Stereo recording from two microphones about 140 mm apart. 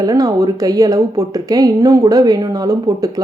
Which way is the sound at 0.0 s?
25° right (ahead or behind).